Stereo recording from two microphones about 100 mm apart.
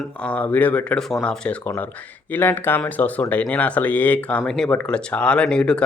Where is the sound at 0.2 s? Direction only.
15° left (ahead or behind).